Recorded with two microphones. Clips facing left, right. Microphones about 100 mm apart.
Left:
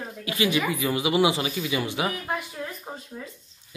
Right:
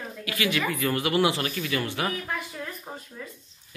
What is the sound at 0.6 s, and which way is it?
Speech, 10° left (ahead or behind).